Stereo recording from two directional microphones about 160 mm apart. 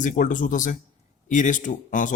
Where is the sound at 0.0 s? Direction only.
55° left (ahead or behind).